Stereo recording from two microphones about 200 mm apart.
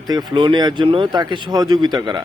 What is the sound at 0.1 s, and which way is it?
A man's voice, 20° right (ahead or behind).